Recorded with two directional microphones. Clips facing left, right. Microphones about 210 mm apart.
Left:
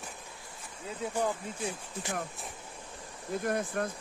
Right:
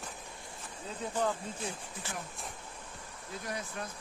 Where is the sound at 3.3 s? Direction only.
55° left (ahead or behind).